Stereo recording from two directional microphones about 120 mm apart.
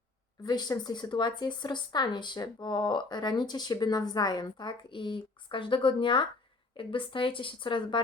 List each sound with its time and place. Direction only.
0.4 s a woman's voice: 35° left (ahead or behind)